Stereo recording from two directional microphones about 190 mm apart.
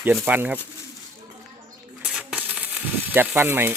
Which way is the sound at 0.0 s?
10° right (ahead or behind).